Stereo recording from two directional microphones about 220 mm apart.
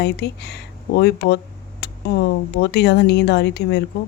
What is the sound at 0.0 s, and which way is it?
Speech, 50° left (ahead or behind).